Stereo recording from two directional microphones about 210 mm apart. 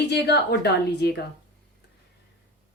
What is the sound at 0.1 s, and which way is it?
Speech, 50° left (ahead or behind).